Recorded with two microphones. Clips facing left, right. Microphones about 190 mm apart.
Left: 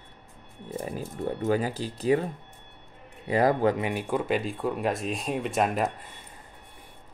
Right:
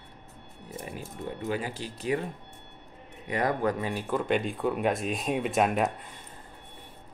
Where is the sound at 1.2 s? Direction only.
40° left (ahead or behind).